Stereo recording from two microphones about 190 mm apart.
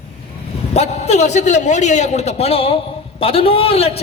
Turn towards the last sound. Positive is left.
turn(degrees=30)  # may be behind; listen again after turning